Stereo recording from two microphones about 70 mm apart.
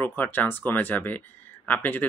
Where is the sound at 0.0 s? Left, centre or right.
Left.